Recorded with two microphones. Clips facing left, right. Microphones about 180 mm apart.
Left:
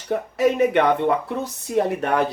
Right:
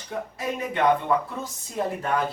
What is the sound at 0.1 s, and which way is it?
Speech, 70° left (ahead or behind).